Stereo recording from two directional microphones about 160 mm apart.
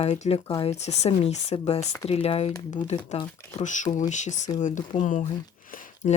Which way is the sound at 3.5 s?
50° left (ahead or behind).